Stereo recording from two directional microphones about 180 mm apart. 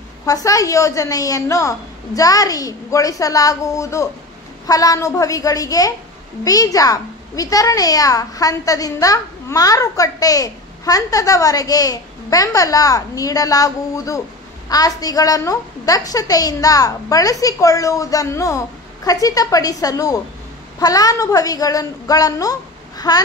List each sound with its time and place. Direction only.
0.2 s a child's voice: 20° left (ahead or behind)